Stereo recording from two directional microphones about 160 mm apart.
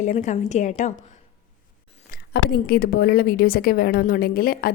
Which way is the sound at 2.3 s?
75° left (ahead or behind).